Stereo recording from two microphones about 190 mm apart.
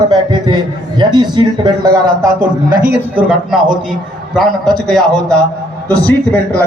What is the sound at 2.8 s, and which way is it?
Speech, 50° right (ahead or behind).